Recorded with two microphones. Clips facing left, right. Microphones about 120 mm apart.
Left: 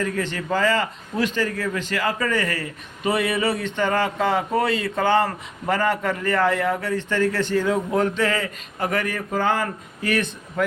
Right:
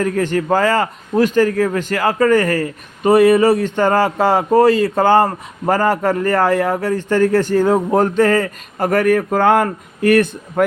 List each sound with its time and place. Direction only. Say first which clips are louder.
0.0 s a man's voice: right 8 dB; 45° right (ahead or behind)